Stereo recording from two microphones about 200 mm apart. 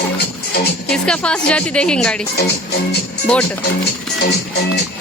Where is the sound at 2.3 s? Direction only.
55° left (ahead or behind).